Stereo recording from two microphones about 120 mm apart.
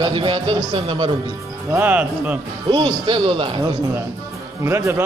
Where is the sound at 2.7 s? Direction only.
45° right (ahead or behind).